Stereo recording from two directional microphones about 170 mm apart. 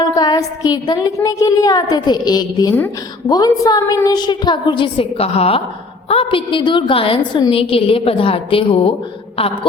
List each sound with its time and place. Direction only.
0.0 s a woman's voice: 20° left (ahead or behind)